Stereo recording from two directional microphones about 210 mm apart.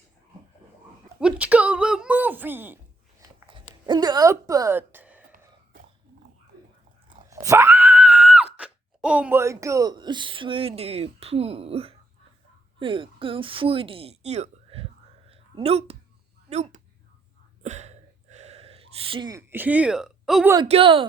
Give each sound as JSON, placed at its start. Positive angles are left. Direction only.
{"t": 1.2, "sound": "speech", "side_deg": -5}
{"t": 3.2, "sound": "a sound", "side_deg": -25}
{"t": 3.8, "sound": "speech", "side_deg": -20}
{"t": 7.1, "sound": "screaming", "side_deg": -15}
{"t": 8.5, "sound": "a woman's voice", "side_deg": -5}
{"t": 15.3, "sound": "a sound", "side_deg": -30}
{"t": 16.5, "sound": "speech", "side_deg": -35}
{"t": 17.6, "sound": "a sound", "side_deg": -30}
{"t": 20.7, "sound": "speech", "side_deg": -25}